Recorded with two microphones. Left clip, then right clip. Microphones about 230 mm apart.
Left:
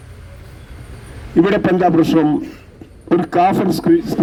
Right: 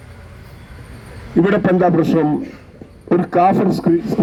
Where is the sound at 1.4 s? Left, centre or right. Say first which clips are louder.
Left 1 dB; left.